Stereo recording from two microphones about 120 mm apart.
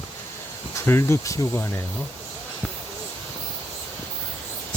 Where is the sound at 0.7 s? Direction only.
20° left (ahead or behind).